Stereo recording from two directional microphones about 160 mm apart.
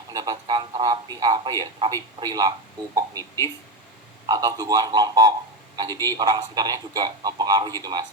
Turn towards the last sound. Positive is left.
turn(degrees=-25)  # may be behind; listen again after turning